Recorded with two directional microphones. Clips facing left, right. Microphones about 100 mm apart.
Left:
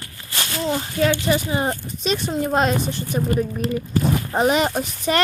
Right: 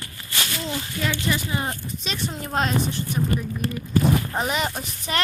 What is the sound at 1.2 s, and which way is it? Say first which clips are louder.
Speech: left 5 dB; 35° left (ahead or behind).